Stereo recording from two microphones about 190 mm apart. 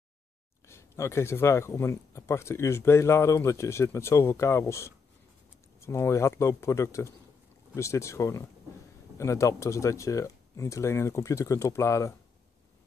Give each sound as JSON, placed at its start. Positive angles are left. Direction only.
{"t": 0.7, "sound": "speech", "side_deg": 15}